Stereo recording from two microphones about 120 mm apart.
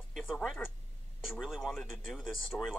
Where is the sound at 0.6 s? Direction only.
5° left (ahead or behind).